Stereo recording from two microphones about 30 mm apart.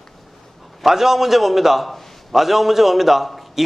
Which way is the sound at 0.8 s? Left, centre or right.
Centre.